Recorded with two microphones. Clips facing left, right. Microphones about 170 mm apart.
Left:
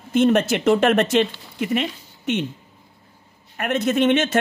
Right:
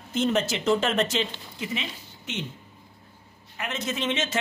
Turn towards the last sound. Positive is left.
turn(degrees=60)  # may be behind; listen again after turning